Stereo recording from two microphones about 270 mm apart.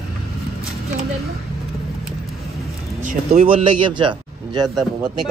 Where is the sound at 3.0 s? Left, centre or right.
Right.